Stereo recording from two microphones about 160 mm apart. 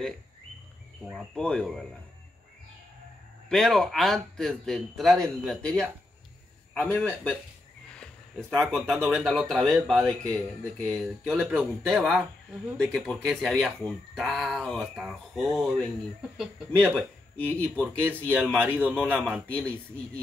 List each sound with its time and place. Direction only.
1.0 s speech: 5° left (ahead or behind)
3.4 s speech: 5° left (ahead or behind)
17.5 s speech: 10° left (ahead or behind)
18.4 s a man's voice: 10° right (ahead or behind)
19.4 s speech: 10° left (ahead or behind)